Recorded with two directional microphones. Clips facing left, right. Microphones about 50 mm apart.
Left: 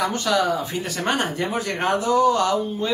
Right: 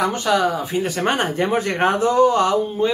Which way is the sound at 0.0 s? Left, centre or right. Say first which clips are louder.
Right 3 dB; centre.